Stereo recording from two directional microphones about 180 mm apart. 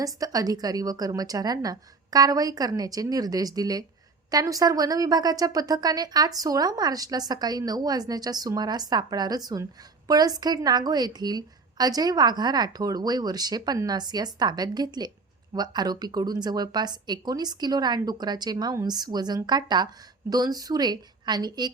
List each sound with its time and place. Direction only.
0.0 s speech: 20° right (ahead or behind)